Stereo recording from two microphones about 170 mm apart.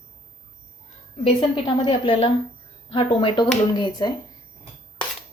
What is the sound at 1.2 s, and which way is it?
A woman's voice, 30° left (ahead or behind).